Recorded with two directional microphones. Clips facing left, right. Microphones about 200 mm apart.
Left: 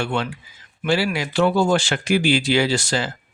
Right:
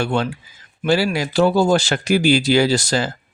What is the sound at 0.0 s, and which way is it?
Speech, 40° right (ahead or behind).